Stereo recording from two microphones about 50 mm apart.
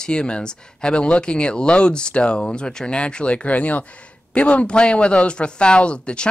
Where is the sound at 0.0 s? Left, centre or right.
Centre.